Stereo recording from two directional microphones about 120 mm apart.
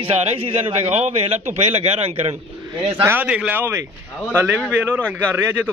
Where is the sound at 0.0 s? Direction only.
50° right (ahead or behind).